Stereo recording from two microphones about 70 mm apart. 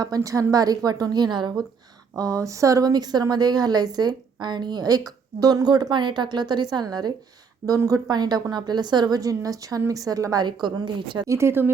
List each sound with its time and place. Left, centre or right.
0.2 s a woman's voice: right
2.1 s a woman's voice: right
7.9 s a woman's voice: right
10.4 s a woman's voice: right
11.3 s speech: right